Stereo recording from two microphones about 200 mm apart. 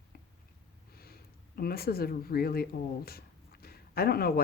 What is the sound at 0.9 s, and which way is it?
Snort, 50° left (ahead or behind).